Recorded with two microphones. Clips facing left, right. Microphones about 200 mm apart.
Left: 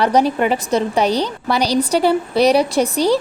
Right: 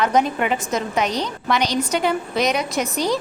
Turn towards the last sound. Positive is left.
turn(degrees=35)  # may be behind; listen again after turning